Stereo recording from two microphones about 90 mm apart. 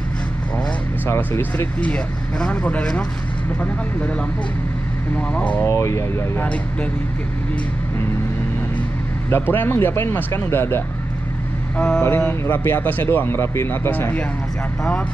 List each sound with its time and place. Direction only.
1.0 s speech: 25° left (ahead or behind)
1.8 s speech: 10° left (ahead or behind)
5.3 s speech: 15° left (ahead or behind)
5.7 s speech: 30° left (ahead or behind)
9.3 s speech: 25° left (ahead or behind)
11.7 s vehicle: 15° left (ahead or behind)
12.2 s speech: 25° left (ahead or behind)